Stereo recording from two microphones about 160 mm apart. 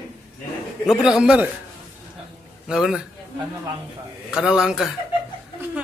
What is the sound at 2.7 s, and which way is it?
Speech, 5° right (ahead or behind).